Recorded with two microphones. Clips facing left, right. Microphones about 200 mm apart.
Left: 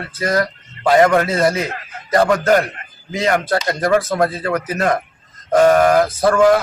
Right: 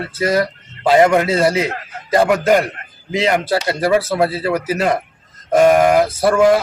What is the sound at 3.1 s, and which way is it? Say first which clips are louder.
Speech: right 1 dB; 20° right (ahead or behind).